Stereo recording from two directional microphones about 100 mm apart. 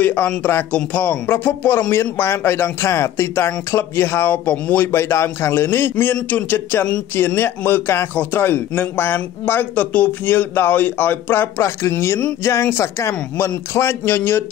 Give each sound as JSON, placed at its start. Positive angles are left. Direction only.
{"t": 0.0, "sound": "a man's voice", "side_deg": 15}